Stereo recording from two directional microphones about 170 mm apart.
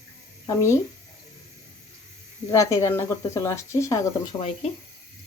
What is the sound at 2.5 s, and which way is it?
Speech, 20° left (ahead or behind).